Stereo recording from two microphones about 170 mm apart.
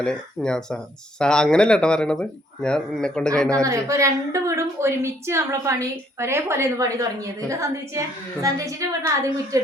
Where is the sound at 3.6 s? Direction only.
15° right (ahead or behind).